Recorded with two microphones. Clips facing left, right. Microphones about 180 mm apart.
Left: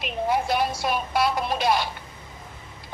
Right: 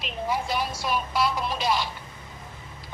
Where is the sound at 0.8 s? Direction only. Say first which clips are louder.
Left 2 dB; 55° left (ahead or behind).